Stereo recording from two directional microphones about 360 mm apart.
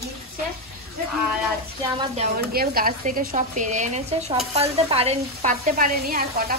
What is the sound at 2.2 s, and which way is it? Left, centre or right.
A woman's voice, right.